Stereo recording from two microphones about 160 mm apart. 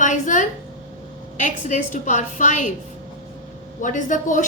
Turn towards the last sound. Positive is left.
turn(degrees=50)  # may be behind; listen again after turning